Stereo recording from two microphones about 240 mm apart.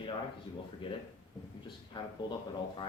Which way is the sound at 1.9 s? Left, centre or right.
Left.